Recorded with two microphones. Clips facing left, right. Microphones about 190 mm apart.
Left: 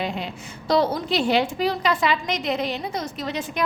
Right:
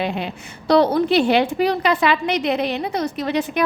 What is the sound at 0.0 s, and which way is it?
A woman's voice, 65° right (ahead or behind).